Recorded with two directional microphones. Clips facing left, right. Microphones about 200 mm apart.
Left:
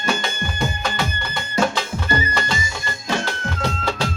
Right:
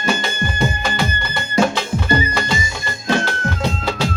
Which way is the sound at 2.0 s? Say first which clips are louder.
Right 4 dB; 15° right (ahead or behind).